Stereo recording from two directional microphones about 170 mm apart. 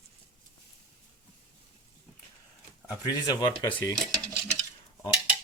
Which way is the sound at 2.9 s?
25° left (ahead or behind).